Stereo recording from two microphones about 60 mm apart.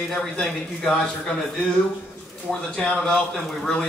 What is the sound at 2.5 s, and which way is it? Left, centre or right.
A man's voice, centre.